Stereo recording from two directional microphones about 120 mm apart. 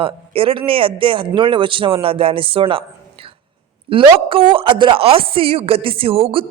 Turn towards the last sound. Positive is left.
turn(degrees=-55)  # may be behind; listen again after turning